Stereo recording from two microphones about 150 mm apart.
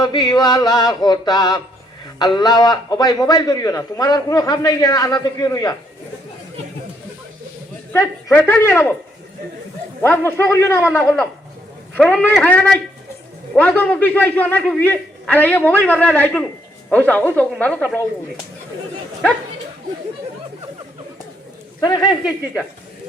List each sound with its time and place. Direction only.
0.0 s a man's voice: 25° left (ahead or behind)
8.4 s a man's voice: 15° left (ahead or behind)
10.0 s a man's voice: 15° left (ahead or behind)
21.8 s speech: 25° left (ahead or behind)